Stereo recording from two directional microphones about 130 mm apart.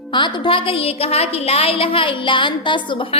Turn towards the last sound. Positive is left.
turn(degrees=40)  # may be behind; listen again after turning